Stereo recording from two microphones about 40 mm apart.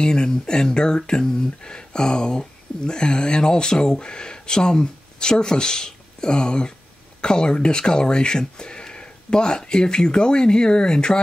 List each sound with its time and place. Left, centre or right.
0.0 s speech: centre